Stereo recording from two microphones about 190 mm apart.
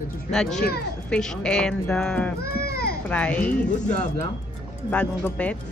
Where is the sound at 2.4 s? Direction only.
55° left (ahead or behind).